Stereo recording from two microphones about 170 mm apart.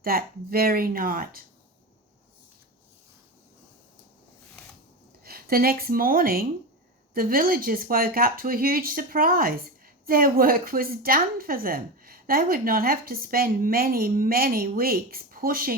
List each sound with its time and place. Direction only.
0.0 s speech: 60° right (ahead or behind)
5.2 s a woman's voice: 60° right (ahead or behind)